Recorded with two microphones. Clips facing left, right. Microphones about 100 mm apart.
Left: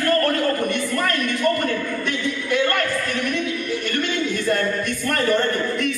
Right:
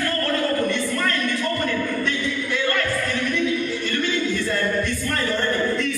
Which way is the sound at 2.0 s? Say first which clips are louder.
Even; 65° left (ahead or behind).